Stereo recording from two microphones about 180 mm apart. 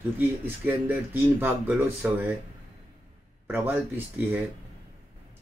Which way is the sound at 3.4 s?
10° right (ahead or behind).